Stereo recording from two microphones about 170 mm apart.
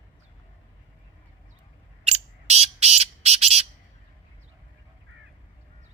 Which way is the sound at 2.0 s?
40° right (ahead or behind).